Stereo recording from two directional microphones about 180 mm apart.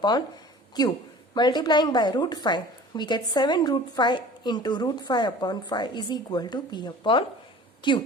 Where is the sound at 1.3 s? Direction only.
25° left (ahead or behind).